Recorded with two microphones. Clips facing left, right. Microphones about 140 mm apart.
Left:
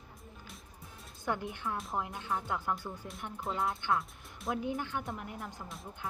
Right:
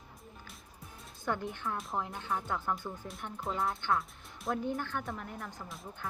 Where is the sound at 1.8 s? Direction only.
Centre (ahead or behind).